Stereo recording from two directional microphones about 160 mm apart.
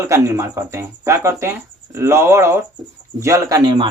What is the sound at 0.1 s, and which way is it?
Speech, 15° right (ahead or behind).